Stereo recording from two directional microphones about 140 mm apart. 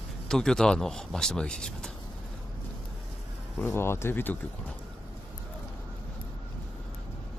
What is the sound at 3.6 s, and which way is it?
Speech, 15° left (ahead or behind).